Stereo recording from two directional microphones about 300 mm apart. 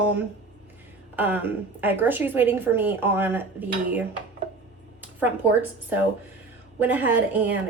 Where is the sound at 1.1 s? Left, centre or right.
Centre.